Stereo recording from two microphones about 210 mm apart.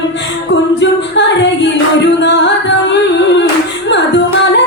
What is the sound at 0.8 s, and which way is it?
Singing, 55° left (ahead or behind).